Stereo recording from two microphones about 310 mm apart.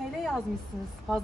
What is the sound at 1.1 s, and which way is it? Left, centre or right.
Speech, centre.